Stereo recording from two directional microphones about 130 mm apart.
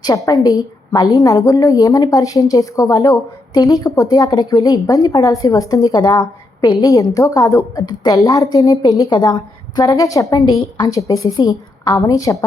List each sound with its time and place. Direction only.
0.0 s a woman's voice: 30° left (ahead or behind)